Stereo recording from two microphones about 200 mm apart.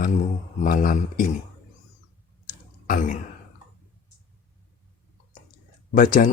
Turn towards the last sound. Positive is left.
turn(degrees=40)  # may be behind; listen again after turning